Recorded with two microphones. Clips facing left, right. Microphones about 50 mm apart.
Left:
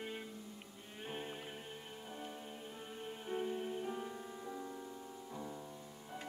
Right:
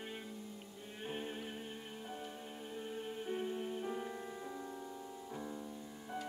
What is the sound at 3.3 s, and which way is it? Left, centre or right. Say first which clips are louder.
Music: left 2 dB; centre.